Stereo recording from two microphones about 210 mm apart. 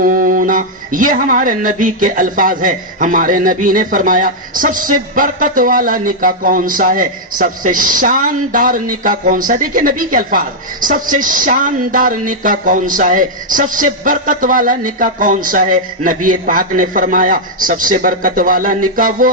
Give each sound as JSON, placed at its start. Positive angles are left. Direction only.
{"t": 0.0, "sound": "a woman's voice", "side_deg": -40}